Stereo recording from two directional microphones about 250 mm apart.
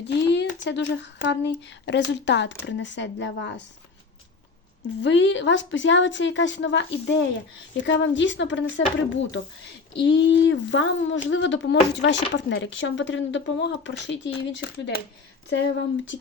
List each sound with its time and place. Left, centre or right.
0.0 s a sound: left
0.6 s speech: left
5.0 s speech: left